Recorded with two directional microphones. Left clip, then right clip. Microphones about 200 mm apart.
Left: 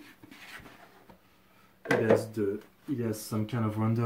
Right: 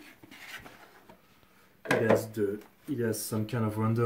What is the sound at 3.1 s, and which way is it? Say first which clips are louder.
Speech: right 2 dB; centre (ahead or behind).